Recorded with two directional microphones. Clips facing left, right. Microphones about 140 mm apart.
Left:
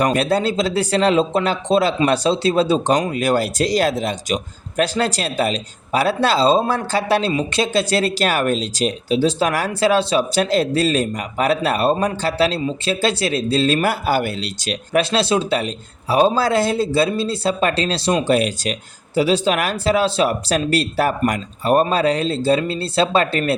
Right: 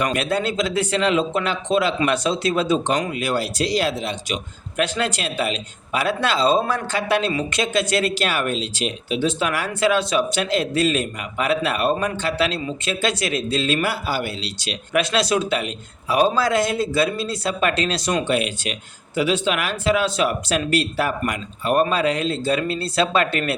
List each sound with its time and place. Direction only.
0.0 s speech: 35° left (ahead or behind)
14.9 s speech: 30° left (ahead or behind)